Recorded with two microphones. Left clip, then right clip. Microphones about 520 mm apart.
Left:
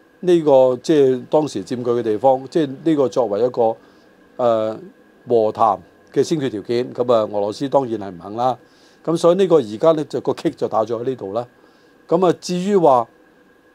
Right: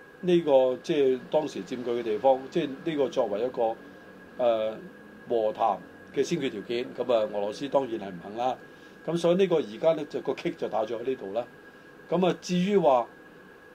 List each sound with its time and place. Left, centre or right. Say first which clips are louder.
0.2 s speech: left 9 dB; left